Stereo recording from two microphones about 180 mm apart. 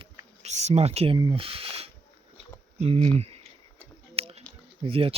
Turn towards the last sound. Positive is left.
turn(degrees=-30)  # may be behind; listen again after turning